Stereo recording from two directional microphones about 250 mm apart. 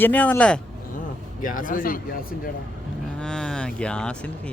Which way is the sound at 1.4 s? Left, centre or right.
Left.